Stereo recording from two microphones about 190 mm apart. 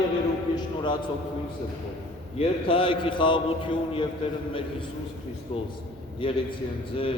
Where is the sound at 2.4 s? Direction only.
30° left (ahead or behind).